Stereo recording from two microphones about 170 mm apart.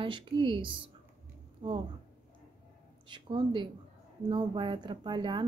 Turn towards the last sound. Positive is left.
turn(degrees=-25)  # may be behind; listen again after turning